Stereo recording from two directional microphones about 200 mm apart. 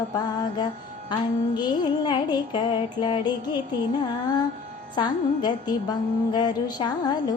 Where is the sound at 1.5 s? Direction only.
20° left (ahead or behind).